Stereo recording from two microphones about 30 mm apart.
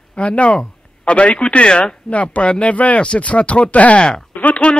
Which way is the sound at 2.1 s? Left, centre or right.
Left.